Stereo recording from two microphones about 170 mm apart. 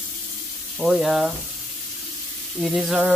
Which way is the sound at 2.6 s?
Centre (ahead or behind).